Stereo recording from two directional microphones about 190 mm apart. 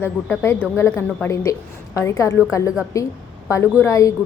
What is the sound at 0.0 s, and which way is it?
Speech, 10° left (ahead or behind).